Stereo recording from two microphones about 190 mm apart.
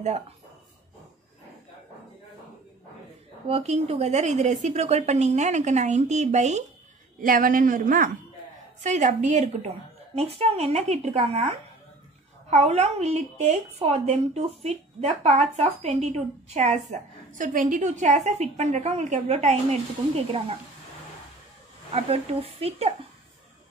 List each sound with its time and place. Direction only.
3.4 s a woman's voice: 35° right (ahead or behind)
21.9 s a woman's voice: 30° right (ahead or behind)